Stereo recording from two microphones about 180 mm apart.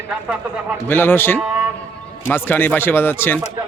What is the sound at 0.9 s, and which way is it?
Speech, 10° left (ahead or behind).